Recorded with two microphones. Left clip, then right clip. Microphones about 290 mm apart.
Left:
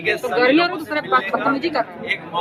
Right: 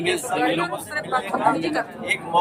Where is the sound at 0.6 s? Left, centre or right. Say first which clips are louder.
Left 6 dB; left.